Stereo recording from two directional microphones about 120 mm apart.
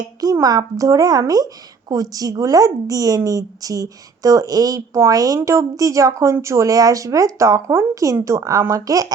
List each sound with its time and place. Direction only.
0.2 s a child's voice: 30° right (ahead or behind)